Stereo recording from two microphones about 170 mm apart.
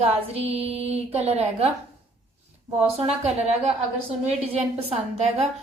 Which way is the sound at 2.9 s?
35° right (ahead or behind).